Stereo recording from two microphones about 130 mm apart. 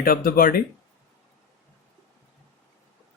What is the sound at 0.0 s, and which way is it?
Speech, 90° left.